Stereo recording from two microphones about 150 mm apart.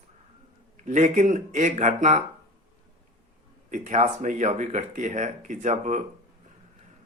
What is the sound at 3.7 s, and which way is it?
Speech, 50° right (ahead or behind).